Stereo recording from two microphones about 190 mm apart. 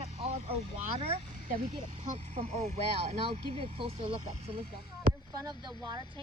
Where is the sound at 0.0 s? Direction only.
30° right (ahead or behind).